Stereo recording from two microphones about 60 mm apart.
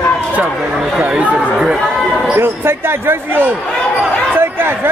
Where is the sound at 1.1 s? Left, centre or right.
Right.